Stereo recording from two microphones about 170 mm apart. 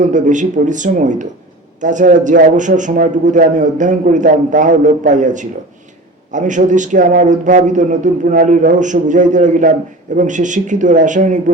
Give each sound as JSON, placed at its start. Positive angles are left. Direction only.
{"t": 0.0, "sound": "a man's voice", "side_deg": -45}